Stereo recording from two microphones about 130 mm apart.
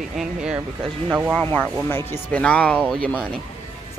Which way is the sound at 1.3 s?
10° left (ahead or behind).